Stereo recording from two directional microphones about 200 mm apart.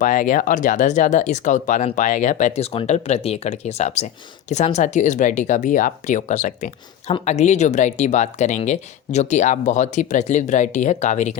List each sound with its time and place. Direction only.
0.0 s speech: 40° left (ahead or behind)